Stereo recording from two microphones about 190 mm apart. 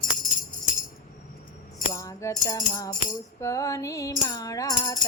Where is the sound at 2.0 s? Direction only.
15° left (ahead or behind).